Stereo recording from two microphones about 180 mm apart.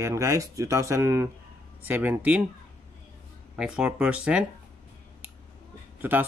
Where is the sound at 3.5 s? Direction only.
5° right (ahead or behind).